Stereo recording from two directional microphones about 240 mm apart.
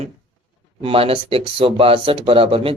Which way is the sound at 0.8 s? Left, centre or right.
Right.